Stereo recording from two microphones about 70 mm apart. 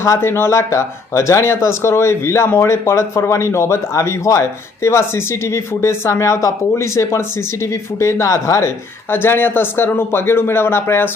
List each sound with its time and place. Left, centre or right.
0.2 s speech: left
9.0 s speech: left